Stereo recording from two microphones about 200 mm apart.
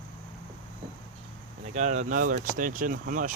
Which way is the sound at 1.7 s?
35° right (ahead or behind).